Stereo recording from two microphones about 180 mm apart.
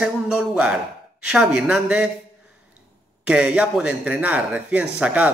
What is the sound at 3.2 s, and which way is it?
A man's voice, 5° right (ahead or behind).